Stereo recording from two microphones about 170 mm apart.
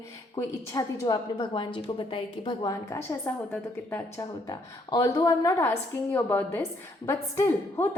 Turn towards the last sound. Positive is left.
turn(degrees=15)  # may be behind; listen again after turning